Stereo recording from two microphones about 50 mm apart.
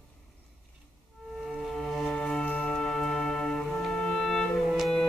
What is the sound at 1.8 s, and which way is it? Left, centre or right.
Music, centre.